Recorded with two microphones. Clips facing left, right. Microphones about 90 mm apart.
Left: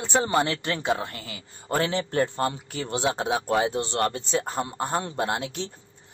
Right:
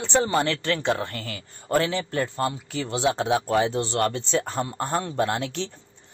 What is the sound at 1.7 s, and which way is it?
Speech, 30° left (ahead or behind).